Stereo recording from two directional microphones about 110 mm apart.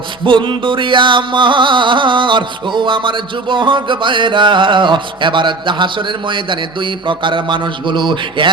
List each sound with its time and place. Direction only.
0.3 s music: 50° right (ahead or behind)